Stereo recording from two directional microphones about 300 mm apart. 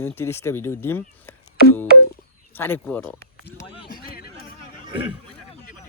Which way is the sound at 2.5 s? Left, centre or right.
Centre.